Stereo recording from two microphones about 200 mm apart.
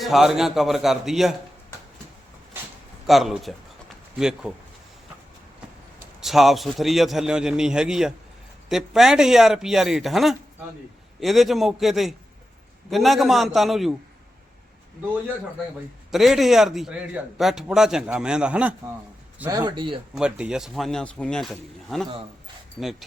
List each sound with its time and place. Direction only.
0.0 s a man's voice: centre (ahead or behind)
3.1 s a man's voice: centre (ahead or behind)
6.1 s a man's voice: centre (ahead or behind)
16.1 s a man's voice: centre (ahead or behind)
19.4 s speech: 15° right (ahead or behind)
20.1 s a man's voice: 5° right (ahead or behind)